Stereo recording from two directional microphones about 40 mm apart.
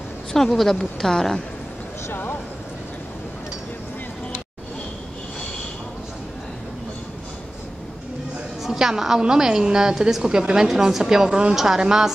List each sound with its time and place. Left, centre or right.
0.3 s a woman's voice: centre
8.6 s a woman's voice: centre